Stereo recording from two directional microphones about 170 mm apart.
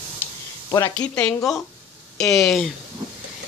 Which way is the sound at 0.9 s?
5° left (ahead or behind).